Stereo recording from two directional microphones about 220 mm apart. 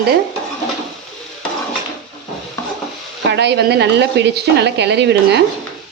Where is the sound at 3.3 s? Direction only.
50° right (ahead or behind).